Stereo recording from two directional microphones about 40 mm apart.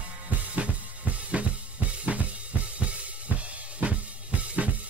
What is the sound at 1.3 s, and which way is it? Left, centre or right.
Drum kit, right.